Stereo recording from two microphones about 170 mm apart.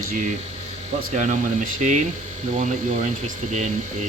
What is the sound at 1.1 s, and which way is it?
Speech, 45° right (ahead or behind).